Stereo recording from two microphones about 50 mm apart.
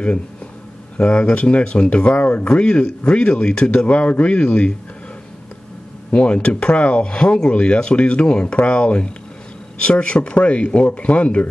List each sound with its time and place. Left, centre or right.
0.9 s speech: left
6.1 s speech: left